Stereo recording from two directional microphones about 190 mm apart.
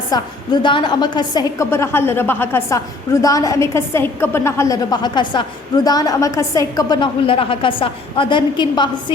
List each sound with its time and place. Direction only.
0.1 s a woman's voice: 25° left (ahead or behind)